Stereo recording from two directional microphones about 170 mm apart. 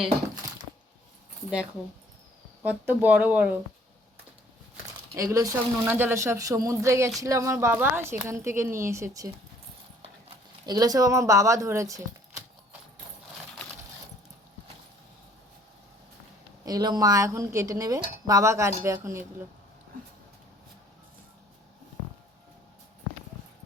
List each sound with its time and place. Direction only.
2.6 s a woman's voice: 10° right (ahead or behind)
5.1 s a woman's voice: 20° right (ahead or behind)
10.7 s speech: 20° right (ahead or behind)
16.6 s a woman's voice: 25° right (ahead or behind)